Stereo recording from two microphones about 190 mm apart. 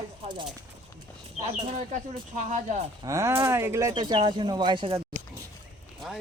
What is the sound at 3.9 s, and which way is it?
Speech, 25° right (ahead or behind).